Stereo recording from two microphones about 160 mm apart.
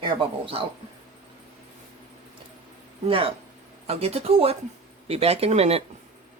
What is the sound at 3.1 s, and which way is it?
Speech, 35° right (ahead or behind).